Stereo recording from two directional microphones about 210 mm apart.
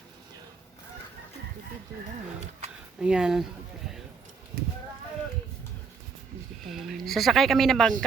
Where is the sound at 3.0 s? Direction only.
5° right (ahead or behind).